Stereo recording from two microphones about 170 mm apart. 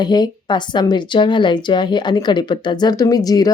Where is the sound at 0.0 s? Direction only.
25° left (ahead or behind).